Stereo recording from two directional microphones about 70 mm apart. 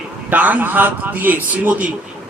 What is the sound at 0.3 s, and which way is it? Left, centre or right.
A man's voice, right.